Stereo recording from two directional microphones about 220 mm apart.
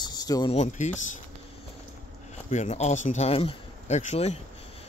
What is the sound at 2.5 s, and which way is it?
Speech, 30° left (ahead or behind).